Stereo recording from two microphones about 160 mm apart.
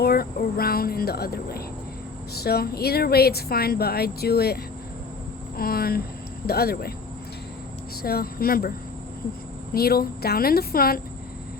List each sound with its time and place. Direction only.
0.0 s speech: 70° left (ahead or behind)
5.5 s speech: 70° left (ahead or behind)
8.0 s speech: 70° left (ahead or behind)
9.7 s speech: 75° left (ahead or behind)